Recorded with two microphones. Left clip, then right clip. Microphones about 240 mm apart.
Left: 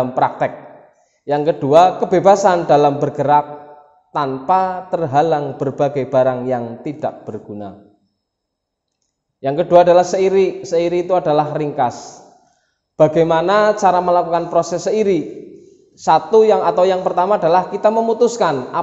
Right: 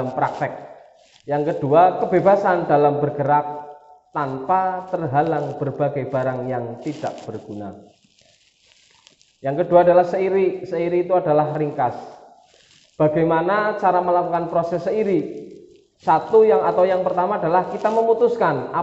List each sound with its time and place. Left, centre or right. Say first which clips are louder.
0.1 s a man's voice: left 5 dB; left
9.4 s a man's voice: left 4 dB; left
12.9 s a man's voice: left 5 dB; left